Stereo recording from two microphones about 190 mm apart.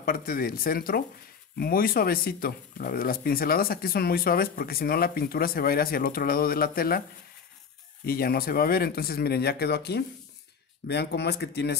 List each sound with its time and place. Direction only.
0.0 s speech: 50° left (ahead or behind)
8.0 s speech: 50° left (ahead or behind)